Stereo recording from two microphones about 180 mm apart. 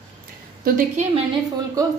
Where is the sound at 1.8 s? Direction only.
20° right (ahead or behind).